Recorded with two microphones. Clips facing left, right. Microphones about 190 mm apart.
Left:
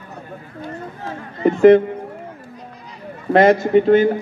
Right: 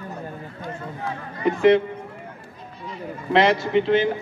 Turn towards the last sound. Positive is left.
turn(degrees=45)  # may be behind; listen again after turning